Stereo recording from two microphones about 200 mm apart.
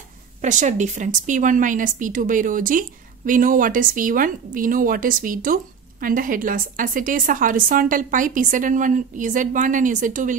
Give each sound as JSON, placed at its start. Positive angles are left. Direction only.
{"t": 0.4, "sound": "speech", "side_deg": -40}